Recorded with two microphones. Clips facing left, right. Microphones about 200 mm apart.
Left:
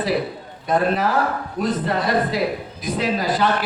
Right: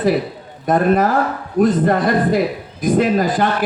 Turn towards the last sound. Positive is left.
turn(degrees=-50)  # may be behind; listen again after turning